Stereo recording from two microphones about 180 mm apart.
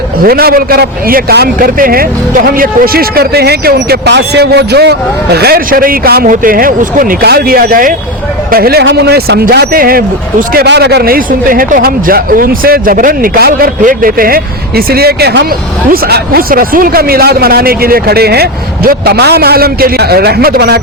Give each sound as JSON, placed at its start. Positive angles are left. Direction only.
{"t": 0.2, "sound": "speech", "side_deg": -55}